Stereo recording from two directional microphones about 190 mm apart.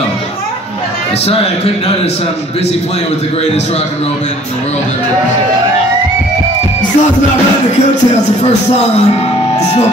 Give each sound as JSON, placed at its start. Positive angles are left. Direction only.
{"t": 8.4, "sound": "speech", "side_deg": 35}